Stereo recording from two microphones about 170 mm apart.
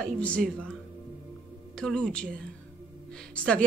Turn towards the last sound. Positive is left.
turn(degrees=5)  # may be behind; listen again after turning